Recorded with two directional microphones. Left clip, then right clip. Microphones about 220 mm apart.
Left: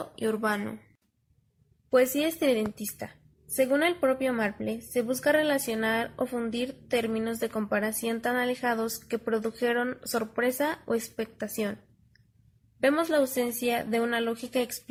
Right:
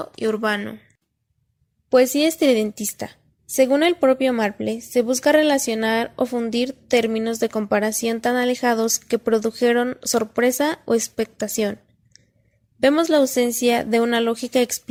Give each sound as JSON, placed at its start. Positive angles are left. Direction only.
{"t": 0.0, "sound": "speech", "side_deg": -30}
{"t": 1.9, "sound": "speech", "side_deg": -30}